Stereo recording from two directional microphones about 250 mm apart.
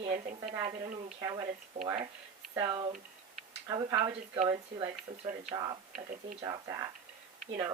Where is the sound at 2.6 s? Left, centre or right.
Centre.